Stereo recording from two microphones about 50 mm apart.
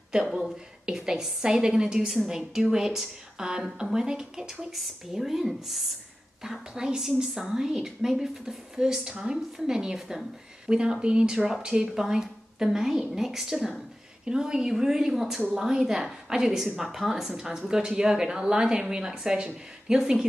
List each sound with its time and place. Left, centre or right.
0.8 s a woman's voice: centre